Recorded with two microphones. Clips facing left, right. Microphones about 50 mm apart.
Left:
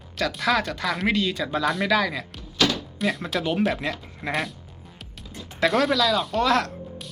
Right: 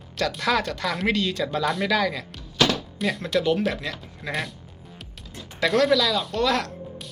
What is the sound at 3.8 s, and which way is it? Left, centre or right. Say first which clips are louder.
Speech: left 3 dB; left.